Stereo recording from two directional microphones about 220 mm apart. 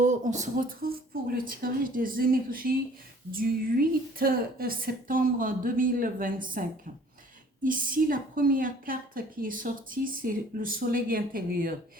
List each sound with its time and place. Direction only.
0.0 s a woman's voice: 35° right (ahead or behind)